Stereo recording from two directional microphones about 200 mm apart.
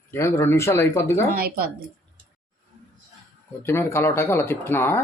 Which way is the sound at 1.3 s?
50° right (ahead or behind).